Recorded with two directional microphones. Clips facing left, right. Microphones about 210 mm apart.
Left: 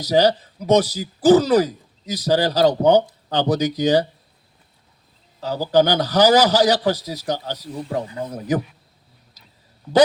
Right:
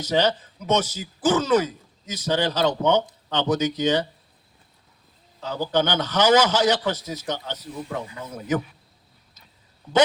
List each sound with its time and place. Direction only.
0.0 s speech: 35° left (ahead or behind)
5.4 s speech: 35° left (ahead or behind)